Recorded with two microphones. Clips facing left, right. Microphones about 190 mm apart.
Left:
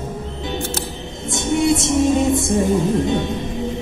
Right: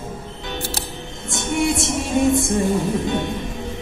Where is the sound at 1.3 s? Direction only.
20° left (ahead or behind).